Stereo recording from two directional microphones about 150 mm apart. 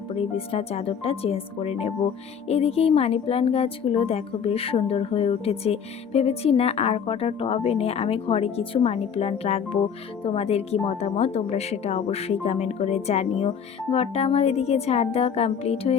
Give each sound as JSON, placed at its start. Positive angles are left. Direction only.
{"t": 0.1, "sound": "a woman's voice", "side_deg": 40}